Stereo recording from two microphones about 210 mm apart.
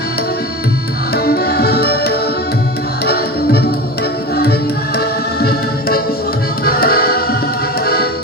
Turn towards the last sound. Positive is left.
turn(degrees=45)  # may be behind; listen again after turning